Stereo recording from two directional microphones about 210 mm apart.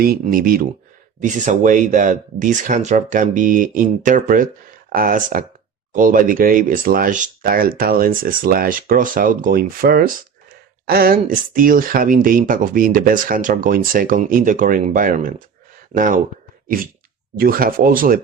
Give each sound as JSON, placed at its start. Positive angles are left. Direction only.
{"t": 0.0, "sound": "speech", "side_deg": -45}
{"t": 16.6, "sound": "sneeze", "side_deg": -40}
{"t": 17.3, "sound": "speech", "side_deg": -45}